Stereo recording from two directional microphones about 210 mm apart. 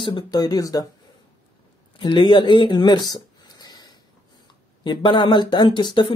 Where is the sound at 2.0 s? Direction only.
25° left (ahead or behind).